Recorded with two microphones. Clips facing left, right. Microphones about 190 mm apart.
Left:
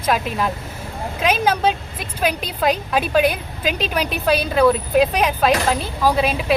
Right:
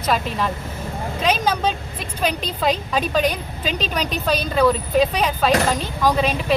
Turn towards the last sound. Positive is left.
turn(degrees=10)  # may be behind; listen again after turning